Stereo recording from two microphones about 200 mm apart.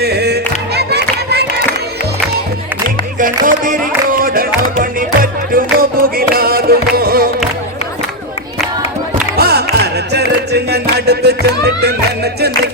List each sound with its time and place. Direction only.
0.0 s music: 55° right (ahead or behind)
3.2 s music: 40° right (ahead or behind)
9.3 s music: 50° right (ahead or behind)